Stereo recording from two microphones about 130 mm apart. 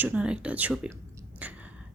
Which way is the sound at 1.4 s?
10° right (ahead or behind).